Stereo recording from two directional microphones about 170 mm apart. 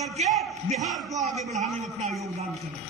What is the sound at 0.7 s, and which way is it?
Speech, centre (ahead or behind).